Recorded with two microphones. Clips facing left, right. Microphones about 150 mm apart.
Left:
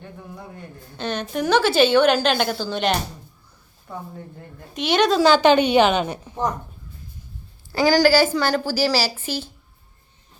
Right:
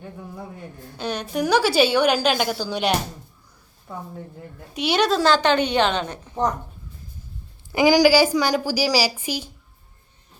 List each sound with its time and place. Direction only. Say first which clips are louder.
0.9 s a woman's voice: even; 10° right (ahead or behind)
4.7 s a woman's voice: left 2 dB; 10° right (ahead or behind)
5.4 s a woman's voice: left 4 dB; 10° left (ahead or behind)
7.7 s a woman's voice: right 1 dB; 15° right (ahead or behind)